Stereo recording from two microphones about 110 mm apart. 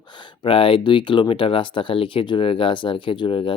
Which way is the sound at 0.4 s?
55° left (ahead or behind).